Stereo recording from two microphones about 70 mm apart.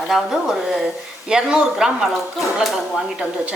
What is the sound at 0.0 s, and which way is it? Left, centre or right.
A woman's voice, centre.